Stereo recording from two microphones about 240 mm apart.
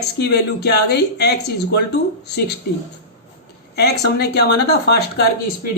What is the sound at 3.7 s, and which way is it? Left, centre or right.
A man's voice, left.